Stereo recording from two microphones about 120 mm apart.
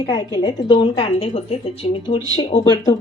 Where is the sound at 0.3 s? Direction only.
40° left (ahead or behind).